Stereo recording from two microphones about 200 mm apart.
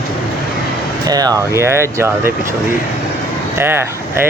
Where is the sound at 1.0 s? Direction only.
20° right (ahead or behind).